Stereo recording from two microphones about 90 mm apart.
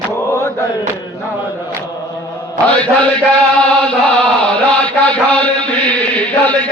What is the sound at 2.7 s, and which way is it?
Mantra, 15° left (ahead or behind).